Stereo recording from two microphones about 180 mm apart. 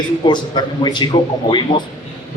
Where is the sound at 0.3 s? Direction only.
25° left (ahead or behind).